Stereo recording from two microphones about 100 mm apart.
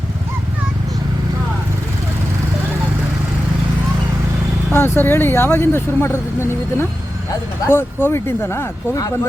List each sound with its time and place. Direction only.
4.7 s speech: 25° left (ahead or behind)